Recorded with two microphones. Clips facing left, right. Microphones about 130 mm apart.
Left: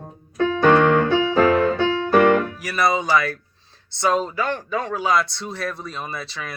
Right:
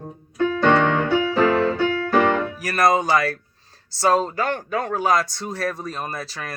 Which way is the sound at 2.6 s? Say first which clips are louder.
Right 2 dB; 45° right (ahead or behind).